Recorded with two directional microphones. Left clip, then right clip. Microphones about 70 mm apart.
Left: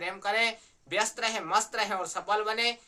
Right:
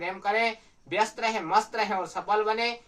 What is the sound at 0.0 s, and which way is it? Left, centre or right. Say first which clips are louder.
Speech: right 2 dB; left.